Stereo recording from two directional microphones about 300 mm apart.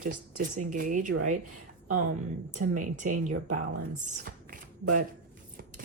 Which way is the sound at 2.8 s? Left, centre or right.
Right.